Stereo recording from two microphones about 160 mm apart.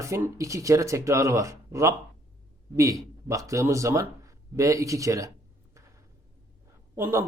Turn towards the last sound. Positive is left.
turn(degrees=-15)  # may be behind; listen again after turning